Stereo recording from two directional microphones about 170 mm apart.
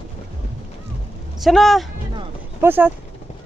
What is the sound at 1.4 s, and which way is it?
Speech, centre (ahead or behind).